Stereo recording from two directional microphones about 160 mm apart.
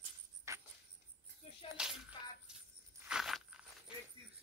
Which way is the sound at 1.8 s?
5° right (ahead or behind).